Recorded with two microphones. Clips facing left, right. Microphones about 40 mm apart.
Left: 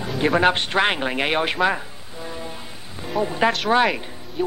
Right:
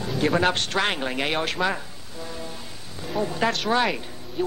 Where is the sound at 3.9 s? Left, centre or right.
Centre.